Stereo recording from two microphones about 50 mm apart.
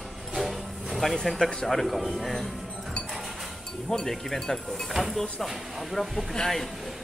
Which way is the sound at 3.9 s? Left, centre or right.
Centre.